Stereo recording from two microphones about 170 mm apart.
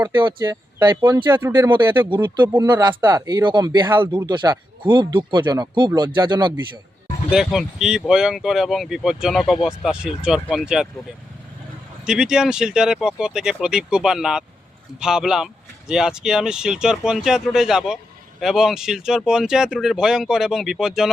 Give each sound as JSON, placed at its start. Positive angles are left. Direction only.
{"t": 0.3, "sound": "speech", "side_deg": -25}
{"t": 1.3, "sound": "speech", "side_deg": -15}
{"t": 1.7, "sound": "speech", "side_deg": -30}
{"t": 3.8, "sound": "speech", "side_deg": -10}
{"t": 4.2, "sound": "speech", "side_deg": -25}
{"t": 7.3, "sound": "speech", "side_deg": 0}
{"t": 12.0, "sound": "speech", "side_deg": -5}